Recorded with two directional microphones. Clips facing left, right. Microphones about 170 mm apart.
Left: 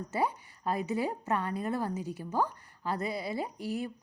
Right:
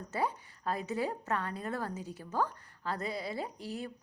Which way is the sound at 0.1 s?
10° left (ahead or behind).